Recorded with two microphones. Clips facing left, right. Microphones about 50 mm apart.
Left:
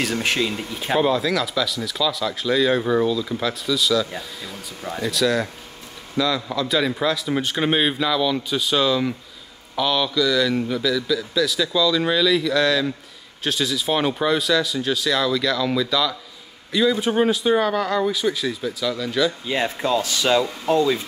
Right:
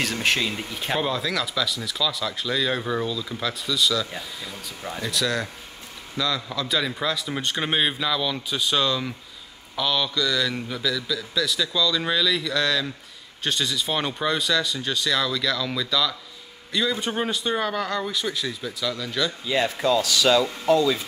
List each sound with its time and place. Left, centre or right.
0.0 s speech: centre
19.4 s speech: left